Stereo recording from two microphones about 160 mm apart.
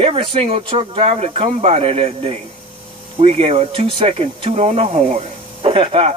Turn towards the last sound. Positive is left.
turn(degrees=-40)  # may be behind; listen again after turning